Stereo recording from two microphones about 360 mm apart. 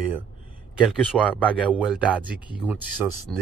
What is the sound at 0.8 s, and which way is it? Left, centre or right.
Speech, centre.